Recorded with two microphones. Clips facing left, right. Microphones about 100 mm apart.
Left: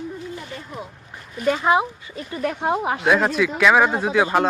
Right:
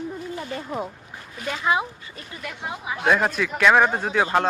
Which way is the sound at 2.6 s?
60° left (ahead or behind).